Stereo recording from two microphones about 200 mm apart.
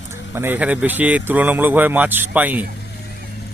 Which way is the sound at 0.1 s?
10° right (ahead or behind).